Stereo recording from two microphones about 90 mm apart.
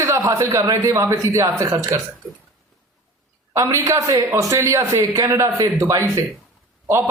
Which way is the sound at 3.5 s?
35° right (ahead or behind).